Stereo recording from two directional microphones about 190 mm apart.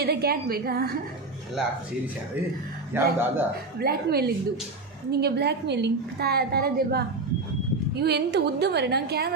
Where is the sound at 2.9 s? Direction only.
10° right (ahead or behind).